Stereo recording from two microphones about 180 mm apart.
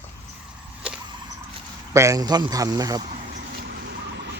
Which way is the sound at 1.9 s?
15° right (ahead or behind).